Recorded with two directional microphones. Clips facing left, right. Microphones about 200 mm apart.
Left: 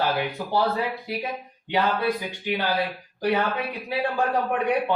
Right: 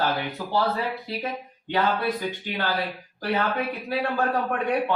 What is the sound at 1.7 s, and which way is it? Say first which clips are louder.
A man's voice: left 1 dB; 15° left (ahead or behind).